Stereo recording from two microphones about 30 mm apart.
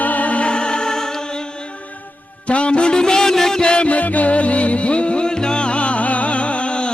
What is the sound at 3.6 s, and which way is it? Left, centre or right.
Music, left.